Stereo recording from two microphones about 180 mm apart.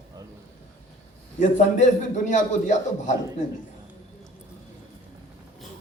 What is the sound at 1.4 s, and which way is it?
A man's voice, 45° left (ahead or behind).